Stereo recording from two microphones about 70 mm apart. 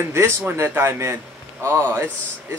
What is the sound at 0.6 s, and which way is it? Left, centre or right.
Speech, right.